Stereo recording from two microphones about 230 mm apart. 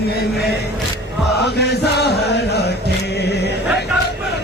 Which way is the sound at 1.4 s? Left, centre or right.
Left.